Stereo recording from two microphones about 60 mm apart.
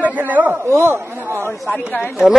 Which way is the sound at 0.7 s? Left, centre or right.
Right.